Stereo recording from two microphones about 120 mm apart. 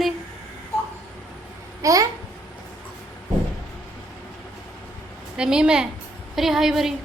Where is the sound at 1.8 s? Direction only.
30° right (ahead or behind).